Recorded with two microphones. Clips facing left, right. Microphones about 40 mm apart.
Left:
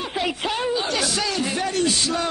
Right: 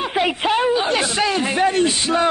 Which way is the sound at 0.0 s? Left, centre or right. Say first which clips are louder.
Right 6 dB; right.